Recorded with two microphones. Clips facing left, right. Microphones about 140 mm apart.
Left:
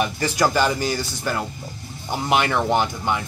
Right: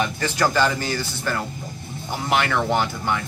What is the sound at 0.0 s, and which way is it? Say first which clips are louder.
Speech: left 1 dB; 10° left (ahead or behind).